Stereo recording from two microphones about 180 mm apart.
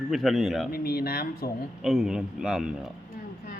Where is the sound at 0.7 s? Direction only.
55° left (ahead or behind).